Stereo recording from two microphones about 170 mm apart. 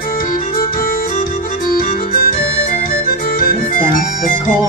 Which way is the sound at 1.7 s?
60° left (ahead or behind).